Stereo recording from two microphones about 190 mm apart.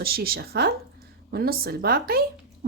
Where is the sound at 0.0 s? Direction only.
55° right (ahead or behind).